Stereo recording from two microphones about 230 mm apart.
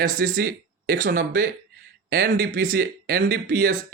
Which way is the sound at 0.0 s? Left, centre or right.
Right.